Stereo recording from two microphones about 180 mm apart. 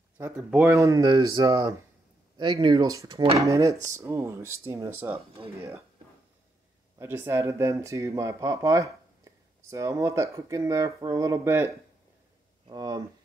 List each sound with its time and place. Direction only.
0.5 s speech: 10° right (ahead or behind)
7.0 s speech: 15° right (ahead or behind)